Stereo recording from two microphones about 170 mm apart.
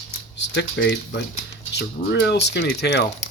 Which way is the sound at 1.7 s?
80° left.